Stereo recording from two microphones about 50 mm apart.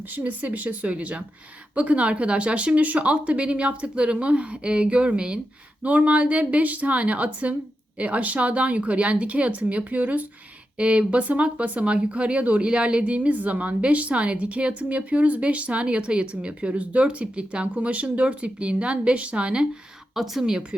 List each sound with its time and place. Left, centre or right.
0.1 s a woman's voice: right
20.1 s speech: centre
20.4 s speech: centre